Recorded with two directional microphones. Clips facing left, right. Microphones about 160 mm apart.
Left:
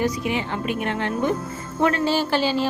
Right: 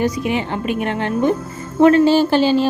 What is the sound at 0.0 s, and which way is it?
Speech, 20° right (ahead or behind).